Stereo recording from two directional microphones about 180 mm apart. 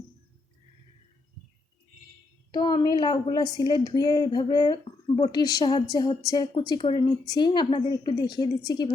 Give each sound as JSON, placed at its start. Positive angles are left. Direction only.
{"t": 2.5, "sound": "speech", "side_deg": 25}